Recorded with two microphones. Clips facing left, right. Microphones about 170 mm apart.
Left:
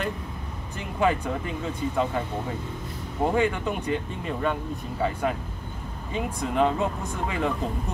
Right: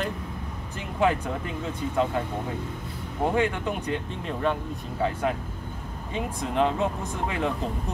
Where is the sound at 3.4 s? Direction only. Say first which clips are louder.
Left 1 dB; centre (ahead or behind).